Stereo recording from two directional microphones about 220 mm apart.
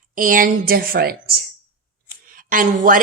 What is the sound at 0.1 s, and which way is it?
Speech, 40° right (ahead or behind).